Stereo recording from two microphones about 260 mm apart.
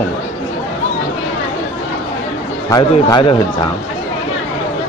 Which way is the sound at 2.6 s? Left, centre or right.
Centre.